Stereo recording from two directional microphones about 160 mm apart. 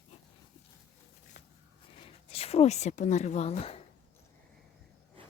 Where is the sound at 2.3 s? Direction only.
40° left (ahead or behind).